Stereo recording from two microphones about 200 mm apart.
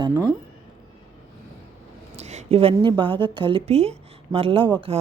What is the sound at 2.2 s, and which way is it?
A woman's voice, 35° right (ahead or behind).